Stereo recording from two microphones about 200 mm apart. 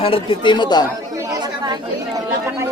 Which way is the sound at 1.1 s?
15° right (ahead or behind).